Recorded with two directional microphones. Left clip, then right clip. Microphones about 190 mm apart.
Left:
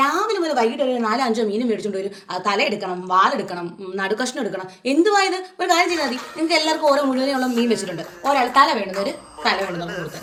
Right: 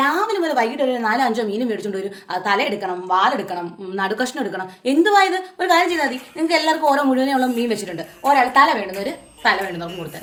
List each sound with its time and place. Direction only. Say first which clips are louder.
0.0 s a woman's voice: right 1 dB; 15° right (ahead or behind)